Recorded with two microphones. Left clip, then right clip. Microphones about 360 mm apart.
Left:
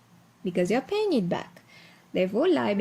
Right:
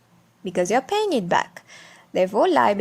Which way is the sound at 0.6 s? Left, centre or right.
Centre.